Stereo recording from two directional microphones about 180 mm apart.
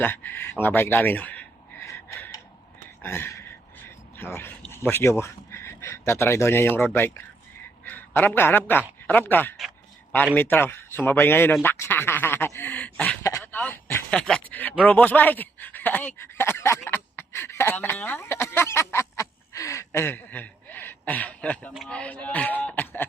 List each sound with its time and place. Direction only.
0.0 s speech: 10° left (ahead or behind)
1.9 s gasp: 15° left (ahead or behind)
3.0 s a sound: 15° left (ahead or behind)
4.2 s a man's voice: 10° left (ahead or behind)
14.8 s a sound: 10° left (ahead or behind)
21.7 s speech: centre (ahead or behind)